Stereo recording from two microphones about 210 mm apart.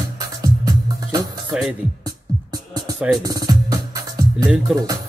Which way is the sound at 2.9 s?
Centre (ahead or behind).